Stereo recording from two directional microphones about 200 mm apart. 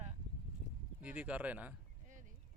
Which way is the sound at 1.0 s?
5° right (ahead or behind).